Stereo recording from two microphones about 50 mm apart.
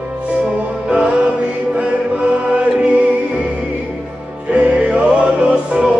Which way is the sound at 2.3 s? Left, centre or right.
Right.